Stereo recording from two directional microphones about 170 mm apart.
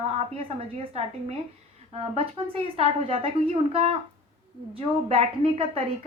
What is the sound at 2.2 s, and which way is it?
A woman's voice, 35° right (ahead or behind).